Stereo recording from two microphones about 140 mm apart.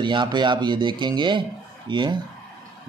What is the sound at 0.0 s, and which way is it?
Speech, 35° right (ahead or behind).